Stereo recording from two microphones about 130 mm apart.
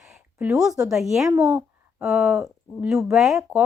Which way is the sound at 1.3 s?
15° right (ahead or behind).